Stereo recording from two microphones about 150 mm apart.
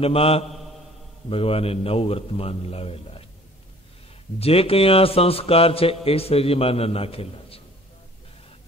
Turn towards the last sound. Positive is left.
turn(degrees=40)  # may be behind; listen again after turning